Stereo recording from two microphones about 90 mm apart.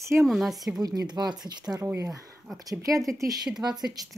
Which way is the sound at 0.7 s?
45° right (ahead or behind).